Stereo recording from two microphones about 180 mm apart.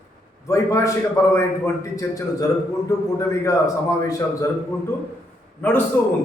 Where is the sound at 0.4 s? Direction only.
15° left (ahead or behind).